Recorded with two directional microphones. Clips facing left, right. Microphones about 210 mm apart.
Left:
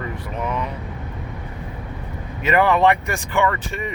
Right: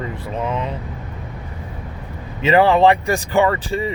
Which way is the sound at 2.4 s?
30° right (ahead or behind).